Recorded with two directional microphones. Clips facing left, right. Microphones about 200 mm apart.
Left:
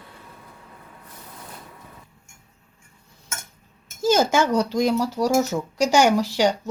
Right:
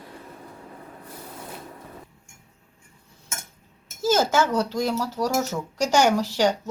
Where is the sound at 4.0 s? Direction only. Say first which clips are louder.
Left 2 dB; 15° left (ahead or behind).